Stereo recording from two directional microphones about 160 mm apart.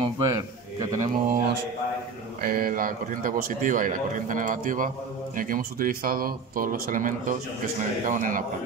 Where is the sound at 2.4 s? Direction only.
60° right (ahead or behind).